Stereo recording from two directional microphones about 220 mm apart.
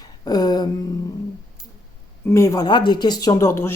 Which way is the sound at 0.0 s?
15° left (ahead or behind).